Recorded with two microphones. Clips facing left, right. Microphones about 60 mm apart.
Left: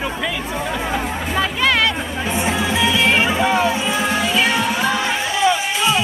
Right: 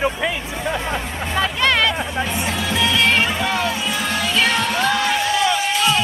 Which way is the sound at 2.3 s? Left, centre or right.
Left.